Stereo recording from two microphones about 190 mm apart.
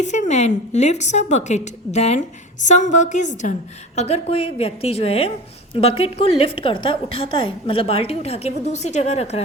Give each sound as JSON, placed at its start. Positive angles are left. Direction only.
{"t": 0.0, "sound": "a woman's voice", "side_deg": 40}